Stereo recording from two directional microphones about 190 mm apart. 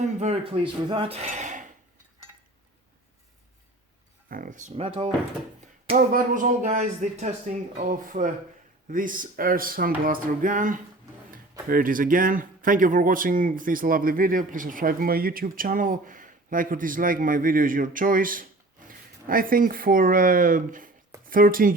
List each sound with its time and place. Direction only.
0.0 s speech: 35° right (ahead or behind)
4.3 s speech: 45° right (ahead or behind)
4.7 s speech: 30° right (ahead or behind)
6.0 s speech: 45° right (ahead or behind)